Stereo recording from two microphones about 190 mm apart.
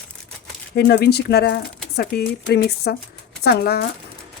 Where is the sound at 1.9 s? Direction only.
55° left (ahead or behind).